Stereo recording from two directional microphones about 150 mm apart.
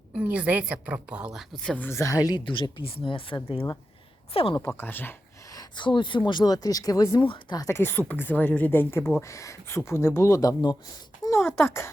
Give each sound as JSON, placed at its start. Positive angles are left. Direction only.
{"t": 0.1, "sound": "a woman's voice", "side_deg": -10}
{"t": 1.7, "sound": "speech", "side_deg": 15}
{"t": 2.2, "sound": "speech", "side_deg": 30}
{"t": 4.6, "sound": "speech", "side_deg": 15}
{"t": 5.5, "sound": "speech", "side_deg": 30}
{"t": 7.8, "sound": "speech", "side_deg": 15}
{"t": 11.2, "sound": "a sound", "side_deg": 20}
{"t": 11.6, "sound": "speech", "side_deg": 15}